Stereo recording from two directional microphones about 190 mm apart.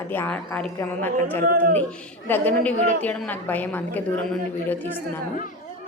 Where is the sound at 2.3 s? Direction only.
10° left (ahead or behind).